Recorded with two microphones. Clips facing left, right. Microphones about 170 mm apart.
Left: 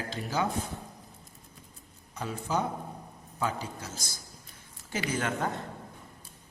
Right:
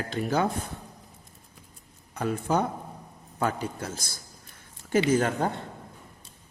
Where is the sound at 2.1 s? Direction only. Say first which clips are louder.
Right 5 dB; 60° right (ahead or behind); by 5.5 s 40° right (ahead or behind).